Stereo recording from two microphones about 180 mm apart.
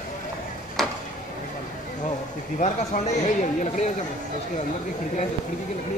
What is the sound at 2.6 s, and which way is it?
Speech, 40° left (ahead or behind).